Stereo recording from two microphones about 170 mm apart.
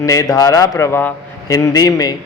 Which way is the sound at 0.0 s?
20° left (ahead or behind).